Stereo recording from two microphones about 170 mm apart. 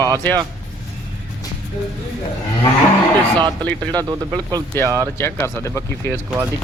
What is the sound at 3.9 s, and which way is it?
Speech, 25° right (ahead or behind).